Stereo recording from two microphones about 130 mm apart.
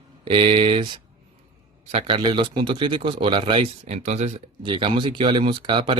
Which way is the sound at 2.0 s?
35° right (ahead or behind).